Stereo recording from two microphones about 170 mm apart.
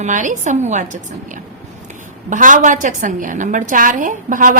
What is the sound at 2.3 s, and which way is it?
A woman's voice, 50° right (ahead or behind).